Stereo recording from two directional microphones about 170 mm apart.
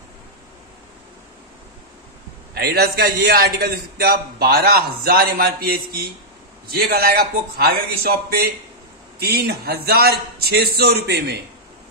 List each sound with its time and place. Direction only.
2.5 s a man's voice: 65° right (ahead or behind)